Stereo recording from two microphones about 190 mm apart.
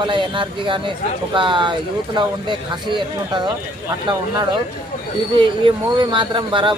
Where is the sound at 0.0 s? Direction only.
25° right (ahead or behind).